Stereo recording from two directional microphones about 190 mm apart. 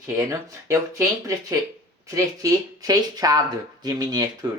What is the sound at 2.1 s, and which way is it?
Speech, 20° right (ahead or behind).